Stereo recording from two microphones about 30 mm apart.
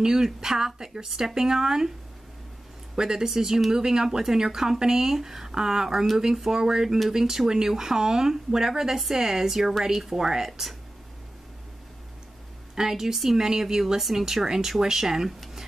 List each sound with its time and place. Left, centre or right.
0.0 s speech: centre
3.0 s speech: centre
12.7 s speech: centre